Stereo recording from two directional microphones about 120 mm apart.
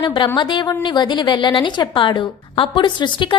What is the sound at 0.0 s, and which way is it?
A woman's voice, 40° left (ahead or behind).